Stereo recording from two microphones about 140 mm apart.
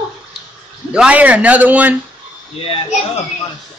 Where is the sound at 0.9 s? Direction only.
10° right (ahead or behind).